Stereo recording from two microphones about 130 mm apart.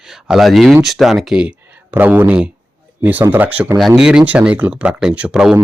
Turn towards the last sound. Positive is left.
turn(degrees=-5)  # may be behind; listen again after turning